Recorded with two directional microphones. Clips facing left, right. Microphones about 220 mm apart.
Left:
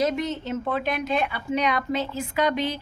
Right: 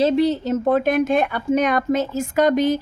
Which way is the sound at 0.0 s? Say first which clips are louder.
Right 8 dB; 30° right (ahead or behind).